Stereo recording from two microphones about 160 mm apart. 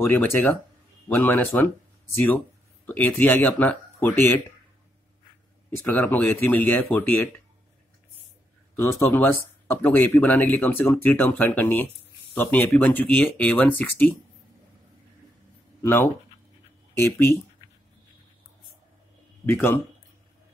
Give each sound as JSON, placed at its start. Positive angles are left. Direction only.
{"t": 0.0, "sound": "speech", "side_deg": 15}
{"t": 5.7, "sound": "speech", "side_deg": 10}
{"t": 8.7, "sound": "speech", "side_deg": 15}
{"t": 15.8, "sound": "speech", "side_deg": 15}
{"t": 19.5, "sound": "speech", "side_deg": 15}